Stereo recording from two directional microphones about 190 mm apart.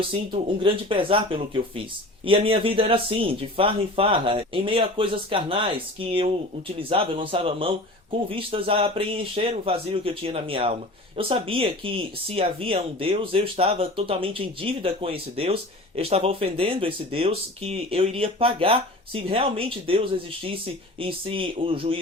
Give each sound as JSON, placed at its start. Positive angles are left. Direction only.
{"t": 0.1, "sound": "speech", "side_deg": -25}